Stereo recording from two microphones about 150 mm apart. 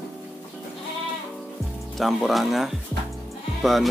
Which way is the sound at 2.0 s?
Centre (ahead or behind).